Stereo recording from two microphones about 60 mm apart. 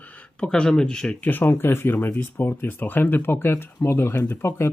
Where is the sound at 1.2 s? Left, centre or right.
Left.